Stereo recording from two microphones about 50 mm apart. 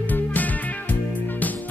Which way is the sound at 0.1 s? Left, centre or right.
Left.